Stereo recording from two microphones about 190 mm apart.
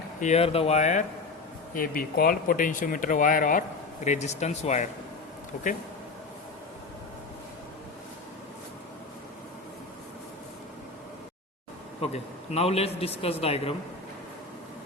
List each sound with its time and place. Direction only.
0.2 s a man's voice: 35° left (ahead or behind)
1.7 s a man's voice: 50° left (ahead or behind)
12.1 s a man's voice: 35° left (ahead or behind)